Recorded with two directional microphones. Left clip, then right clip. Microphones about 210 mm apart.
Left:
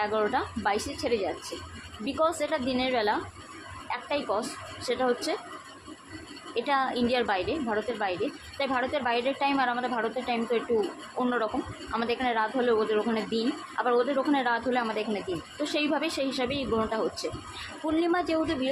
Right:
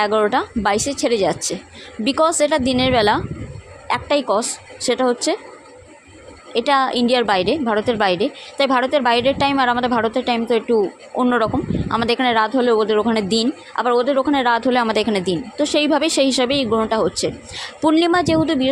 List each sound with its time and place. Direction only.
0.0 s a woman's voice: 45° right (ahead or behind)
6.5 s a woman's voice: 40° right (ahead or behind)